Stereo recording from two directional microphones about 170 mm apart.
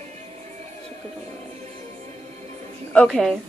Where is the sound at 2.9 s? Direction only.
5° left (ahead or behind).